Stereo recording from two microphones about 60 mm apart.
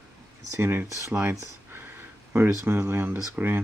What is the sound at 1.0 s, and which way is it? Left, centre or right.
Speech, right.